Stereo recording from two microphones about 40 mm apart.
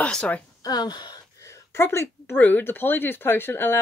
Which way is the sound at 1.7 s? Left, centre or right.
Left.